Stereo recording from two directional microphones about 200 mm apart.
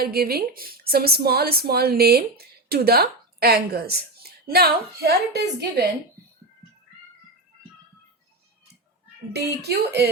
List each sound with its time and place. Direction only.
0.0 s a woman's voice: 50° right (ahead or behind)
9.3 s a woman's voice: 55° right (ahead or behind)